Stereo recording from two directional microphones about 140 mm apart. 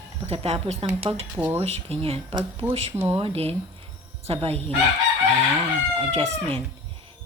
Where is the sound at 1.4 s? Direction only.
10° right (ahead or behind).